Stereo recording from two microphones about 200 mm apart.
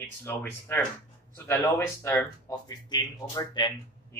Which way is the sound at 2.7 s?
20° left (ahead or behind).